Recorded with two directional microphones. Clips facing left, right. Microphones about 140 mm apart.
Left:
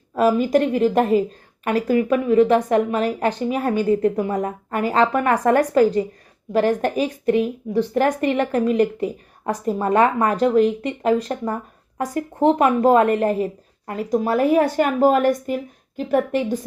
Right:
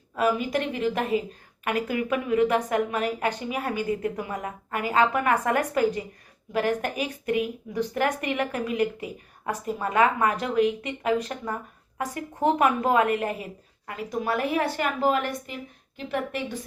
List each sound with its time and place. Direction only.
0.2 s a woman's voice: 40° left (ahead or behind)